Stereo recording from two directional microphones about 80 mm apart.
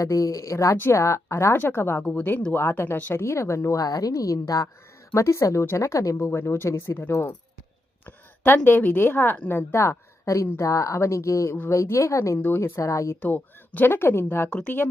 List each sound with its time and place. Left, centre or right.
0.0 s speech: left
2.0 s a woman's voice: left
12.4 s speech: left
13.1 s speech: left